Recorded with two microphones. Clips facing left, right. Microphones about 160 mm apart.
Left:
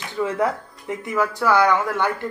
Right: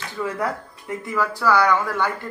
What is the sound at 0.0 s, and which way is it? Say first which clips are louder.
Speech: left 4 dB; 20° left (ahead or behind).